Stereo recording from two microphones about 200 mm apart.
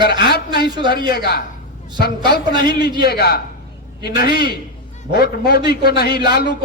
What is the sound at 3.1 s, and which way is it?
A man's voice, 50° left (ahead or behind).